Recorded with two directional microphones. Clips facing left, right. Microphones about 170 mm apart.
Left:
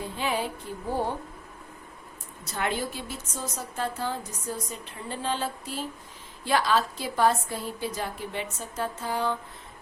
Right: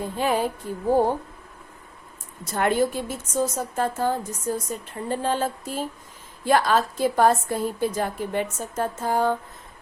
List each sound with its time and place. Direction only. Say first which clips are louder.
0.0 s a woman's voice: right 6 dB; 45° right (ahead or behind)
2.5 s a woman's voice: right 8 dB; 50° right (ahead or behind)